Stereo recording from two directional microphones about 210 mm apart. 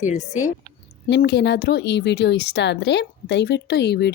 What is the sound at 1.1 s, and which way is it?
Speech, 50° left (ahead or behind).